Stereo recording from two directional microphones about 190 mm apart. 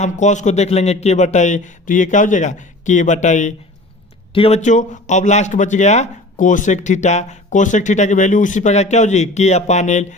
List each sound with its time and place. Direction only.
0.0 s a man's voice: 40° left (ahead or behind)